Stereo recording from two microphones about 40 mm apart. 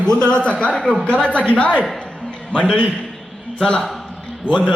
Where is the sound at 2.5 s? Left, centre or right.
Left.